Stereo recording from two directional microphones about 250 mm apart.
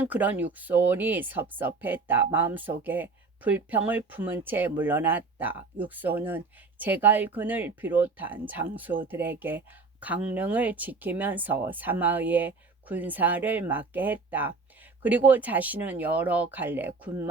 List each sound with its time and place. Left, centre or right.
0.0 s speech: centre